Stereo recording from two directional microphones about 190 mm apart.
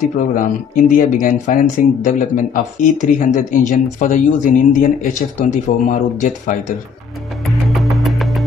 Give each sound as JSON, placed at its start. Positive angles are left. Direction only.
{"t": 0.0, "sound": "speech", "side_deg": 45}
{"t": 7.4, "sound": "music", "side_deg": 0}